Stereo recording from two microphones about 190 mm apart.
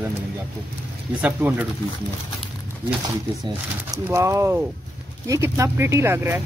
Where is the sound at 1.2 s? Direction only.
10° right (ahead or behind).